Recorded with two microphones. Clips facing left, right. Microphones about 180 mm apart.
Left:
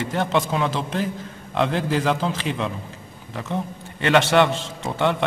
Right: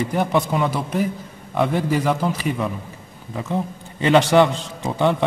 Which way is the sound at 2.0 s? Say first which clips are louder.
Right 1 dB; 5° right (ahead or behind).